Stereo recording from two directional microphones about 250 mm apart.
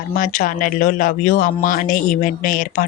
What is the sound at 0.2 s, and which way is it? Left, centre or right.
Speech, left.